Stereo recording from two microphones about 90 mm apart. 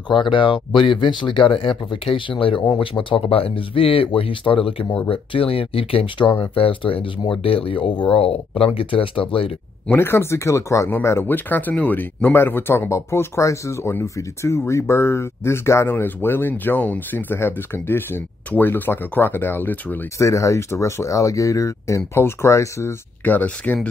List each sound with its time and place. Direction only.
0.1 s speech: 65° left (ahead or behind); by 9.5 s 85° left
9.8 s speech: 25° left (ahead or behind)
20.2 s speech: 35° left (ahead or behind)
23.2 s speech: 20° left (ahead or behind)